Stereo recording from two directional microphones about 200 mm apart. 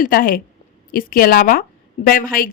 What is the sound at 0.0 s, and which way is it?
A woman's voice, 45° left (ahead or behind).